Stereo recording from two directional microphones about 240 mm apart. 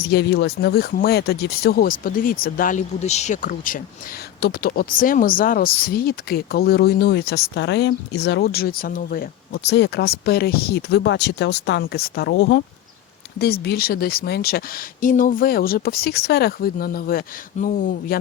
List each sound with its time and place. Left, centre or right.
0.0 s speech: left